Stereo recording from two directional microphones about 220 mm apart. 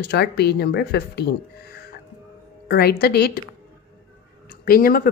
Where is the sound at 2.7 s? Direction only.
45° left (ahead or behind).